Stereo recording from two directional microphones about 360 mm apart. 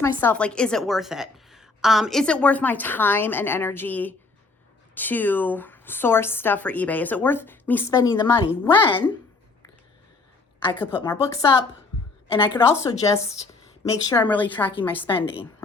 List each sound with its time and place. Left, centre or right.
0.0 s speech: centre
10.6 s a woman's voice: centre